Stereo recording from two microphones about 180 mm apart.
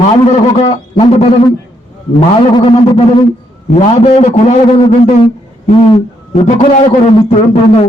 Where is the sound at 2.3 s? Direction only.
30° left (ahead or behind).